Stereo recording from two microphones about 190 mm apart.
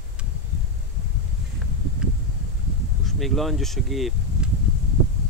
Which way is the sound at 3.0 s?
Centre (ahead or behind).